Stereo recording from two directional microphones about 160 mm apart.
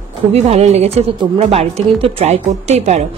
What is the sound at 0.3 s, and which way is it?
A woman's voice, 40° right (ahead or behind).